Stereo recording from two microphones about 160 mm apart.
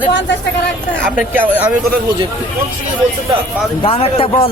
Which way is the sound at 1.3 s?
10° right (ahead or behind).